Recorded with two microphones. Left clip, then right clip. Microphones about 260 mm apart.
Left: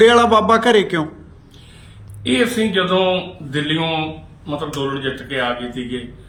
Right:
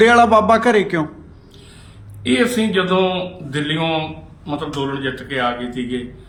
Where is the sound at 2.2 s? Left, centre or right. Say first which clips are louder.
Even; centre.